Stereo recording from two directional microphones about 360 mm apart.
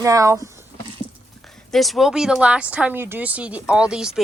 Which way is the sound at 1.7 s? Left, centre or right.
Centre.